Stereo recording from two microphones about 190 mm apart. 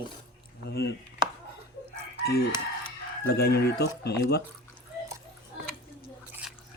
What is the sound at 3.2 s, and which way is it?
Speech, 55° left (ahead or behind).